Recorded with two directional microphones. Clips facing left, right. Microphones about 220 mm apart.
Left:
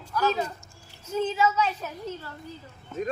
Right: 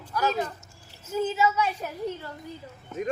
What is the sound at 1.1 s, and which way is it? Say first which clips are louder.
Speech: even; 10° right (ahead or behind).